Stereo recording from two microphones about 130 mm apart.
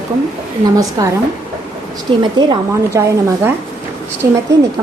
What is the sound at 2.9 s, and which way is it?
Speech, 20° right (ahead or behind).